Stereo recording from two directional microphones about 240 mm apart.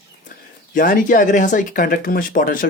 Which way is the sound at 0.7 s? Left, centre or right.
Left.